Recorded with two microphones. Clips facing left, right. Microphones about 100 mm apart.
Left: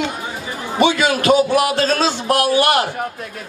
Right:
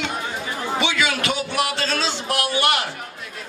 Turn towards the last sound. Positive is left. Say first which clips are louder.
# left 6 dB
turn(degrees=45)  # may be behind; listen again after turning